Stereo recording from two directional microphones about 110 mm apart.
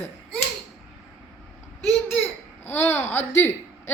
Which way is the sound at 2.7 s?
20° left (ahead or behind).